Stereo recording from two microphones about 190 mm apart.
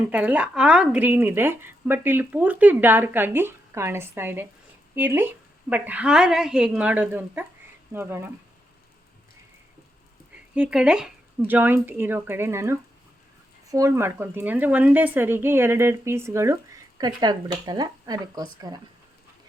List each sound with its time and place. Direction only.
0.1 s speech: 10° right (ahead or behind)
10.5 s speech: 5° right (ahead or behind)